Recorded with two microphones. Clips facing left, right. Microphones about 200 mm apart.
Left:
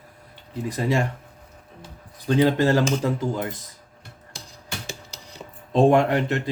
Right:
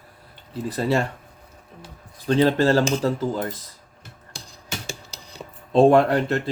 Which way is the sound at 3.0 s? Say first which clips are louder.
Right 2 dB; 35° right (ahead or behind).